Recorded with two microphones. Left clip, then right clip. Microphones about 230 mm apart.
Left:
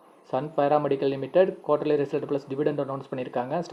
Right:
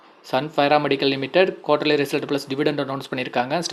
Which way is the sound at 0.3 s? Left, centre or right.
Right.